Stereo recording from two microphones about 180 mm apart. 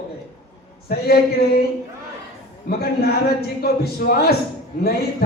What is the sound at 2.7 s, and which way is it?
Speech, 60° left (ahead or behind).